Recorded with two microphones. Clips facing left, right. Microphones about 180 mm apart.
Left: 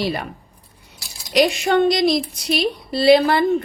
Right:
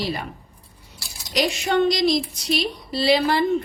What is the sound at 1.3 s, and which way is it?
Speech, 55° left (ahead or behind).